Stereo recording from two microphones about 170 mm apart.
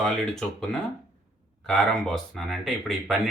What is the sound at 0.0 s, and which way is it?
Speech, centre (ahead or behind).